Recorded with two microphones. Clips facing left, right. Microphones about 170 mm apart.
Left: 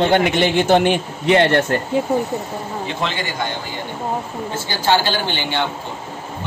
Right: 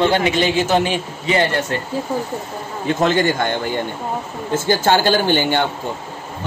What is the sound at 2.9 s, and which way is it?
Speech, 45° right (ahead or behind).